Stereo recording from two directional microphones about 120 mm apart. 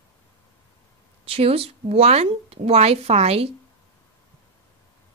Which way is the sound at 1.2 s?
55° right (ahead or behind).